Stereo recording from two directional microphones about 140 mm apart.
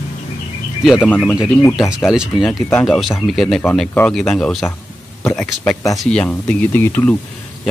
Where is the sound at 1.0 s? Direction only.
10° left (ahead or behind).